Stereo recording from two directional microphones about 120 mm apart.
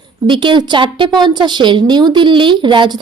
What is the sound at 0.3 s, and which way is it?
A woman's voice, 40° right (ahead or behind).